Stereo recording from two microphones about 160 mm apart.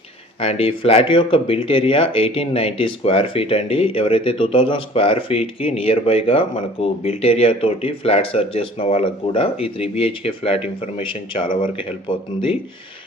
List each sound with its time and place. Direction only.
0.3 s speech: 40° left (ahead or behind)